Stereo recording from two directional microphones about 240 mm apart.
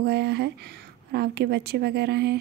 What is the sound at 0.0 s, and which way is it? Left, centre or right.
A woman's voice, right.